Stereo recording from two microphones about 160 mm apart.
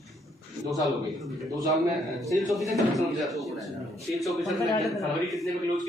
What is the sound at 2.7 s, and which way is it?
A man's voice, centre (ahead or behind).